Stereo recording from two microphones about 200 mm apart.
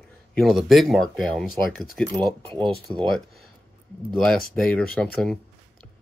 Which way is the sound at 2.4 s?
25° right (ahead or behind).